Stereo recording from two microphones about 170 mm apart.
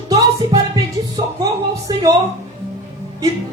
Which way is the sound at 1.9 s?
25° right (ahead or behind).